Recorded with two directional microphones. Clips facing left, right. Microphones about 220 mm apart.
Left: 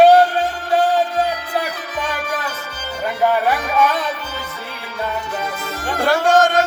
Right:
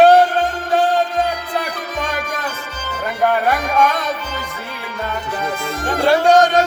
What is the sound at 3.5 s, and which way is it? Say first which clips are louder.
Music: right 1 dB; 5° left (ahead or behind).